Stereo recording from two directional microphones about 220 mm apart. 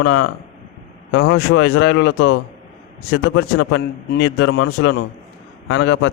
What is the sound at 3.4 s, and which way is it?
Speech, 60° left (ahead or behind).